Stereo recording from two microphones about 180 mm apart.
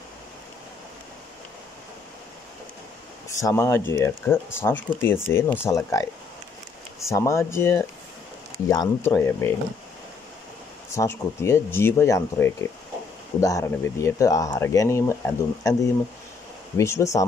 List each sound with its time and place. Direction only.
3.3 s speech: 15° left (ahead or behind)
7.1 s speech: 15° left (ahead or behind)
11.0 s speech: 15° left (ahead or behind)